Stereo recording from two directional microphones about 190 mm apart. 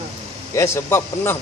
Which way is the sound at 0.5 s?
10° left (ahead or behind).